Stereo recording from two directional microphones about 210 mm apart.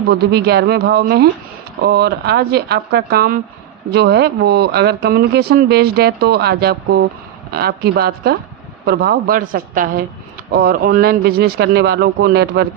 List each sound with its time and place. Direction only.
0.1 s speech: 50° right (ahead or behind)